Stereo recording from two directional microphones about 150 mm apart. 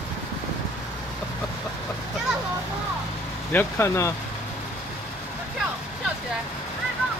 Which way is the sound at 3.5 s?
15° left (ahead or behind).